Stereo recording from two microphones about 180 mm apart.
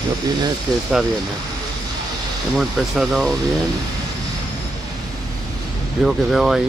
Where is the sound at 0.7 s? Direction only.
20° right (ahead or behind).